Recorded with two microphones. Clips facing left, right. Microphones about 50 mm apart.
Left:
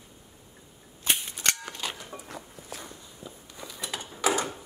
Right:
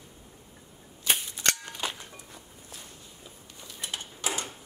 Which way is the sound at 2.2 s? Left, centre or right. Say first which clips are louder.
Left 6 dB; left.